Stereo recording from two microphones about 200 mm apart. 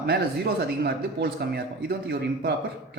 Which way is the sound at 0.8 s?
55° right (ahead or behind).